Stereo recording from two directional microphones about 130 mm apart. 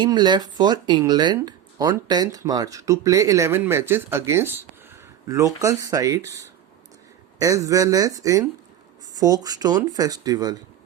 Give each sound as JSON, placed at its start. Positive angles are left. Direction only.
{"t": 0.0, "sound": "speech", "side_deg": -35}
{"t": 7.3, "sound": "speech", "side_deg": -25}